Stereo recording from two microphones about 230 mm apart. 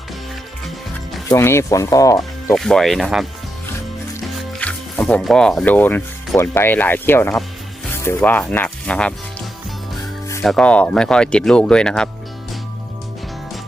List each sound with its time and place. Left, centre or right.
1.3 s speech: centre
2.6 s speech: centre
4.5 s speech: centre
10.4 s speech: centre